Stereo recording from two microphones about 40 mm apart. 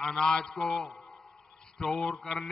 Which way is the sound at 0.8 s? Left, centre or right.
Centre.